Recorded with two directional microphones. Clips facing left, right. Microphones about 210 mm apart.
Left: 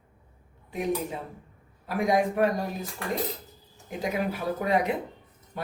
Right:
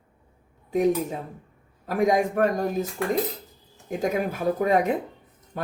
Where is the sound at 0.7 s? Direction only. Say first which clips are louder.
Right 7 dB; 45° right (ahead or behind).